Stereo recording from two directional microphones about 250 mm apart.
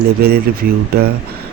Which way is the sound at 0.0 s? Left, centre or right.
Right.